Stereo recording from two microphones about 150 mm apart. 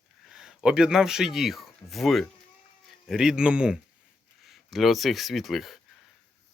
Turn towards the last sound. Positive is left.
turn(degrees=0)  # may be behind; listen again after turning